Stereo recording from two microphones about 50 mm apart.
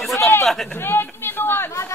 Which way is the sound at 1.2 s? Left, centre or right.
Left.